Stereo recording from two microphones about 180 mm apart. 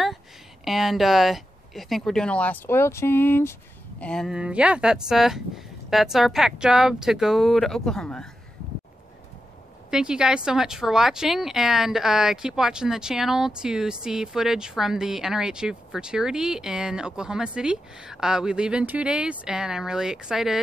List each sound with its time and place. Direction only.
0.7 s speech: centre (ahead or behind)
9.8 s speech: 5° right (ahead or behind)